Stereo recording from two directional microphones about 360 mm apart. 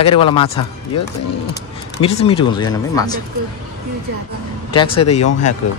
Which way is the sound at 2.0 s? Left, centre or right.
Centre.